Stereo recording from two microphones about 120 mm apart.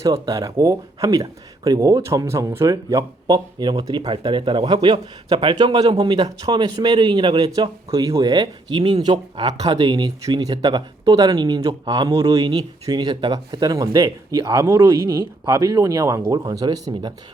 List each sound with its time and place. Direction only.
0.0 s speech: 25° right (ahead or behind)